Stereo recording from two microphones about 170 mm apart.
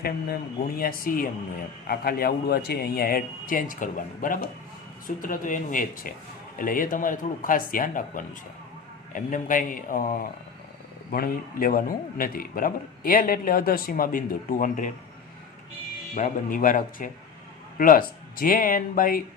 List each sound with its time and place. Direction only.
0.8 s speech: 60° left (ahead or behind)
16.1 s speech: 50° left (ahead or behind)